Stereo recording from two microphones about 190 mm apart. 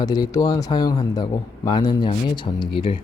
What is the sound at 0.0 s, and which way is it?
A man's voice, 20° left (ahead or behind).